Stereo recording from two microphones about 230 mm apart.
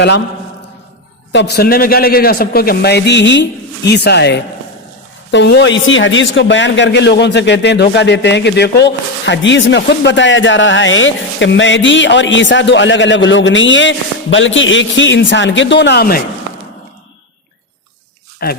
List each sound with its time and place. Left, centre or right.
1.3 s speech: left
18.4 s speech: left